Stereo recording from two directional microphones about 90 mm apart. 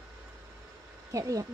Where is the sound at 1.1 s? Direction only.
40° right (ahead or behind).